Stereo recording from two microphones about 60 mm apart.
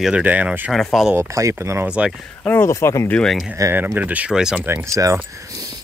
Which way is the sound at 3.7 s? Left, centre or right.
Right.